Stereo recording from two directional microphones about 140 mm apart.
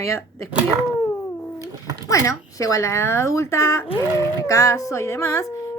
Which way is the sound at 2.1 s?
25° left (ahead or behind).